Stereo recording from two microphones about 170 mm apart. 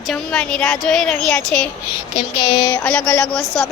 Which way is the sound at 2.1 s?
30° left (ahead or behind).